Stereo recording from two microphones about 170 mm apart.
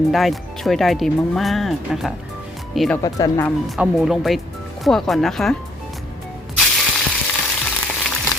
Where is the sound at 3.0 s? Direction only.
20° left (ahead or behind).